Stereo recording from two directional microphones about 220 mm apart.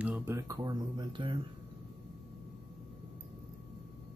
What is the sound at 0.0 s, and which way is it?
Speech, 5° right (ahead or behind).